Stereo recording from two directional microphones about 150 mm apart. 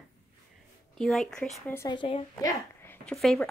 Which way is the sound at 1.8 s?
35° left (ahead or behind).